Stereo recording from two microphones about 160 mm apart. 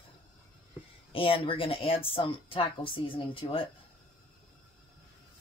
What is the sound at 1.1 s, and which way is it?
Speech, 35° left (ahead or behind).